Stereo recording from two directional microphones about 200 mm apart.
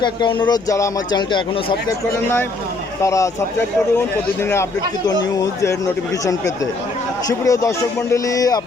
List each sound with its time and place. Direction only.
0.0 s speech: 25° left (ahead or behind)
3.0 s a man's voice: 15° left (ahead or behind)
7.3 s a man's voice: 15° left (ahead or behind)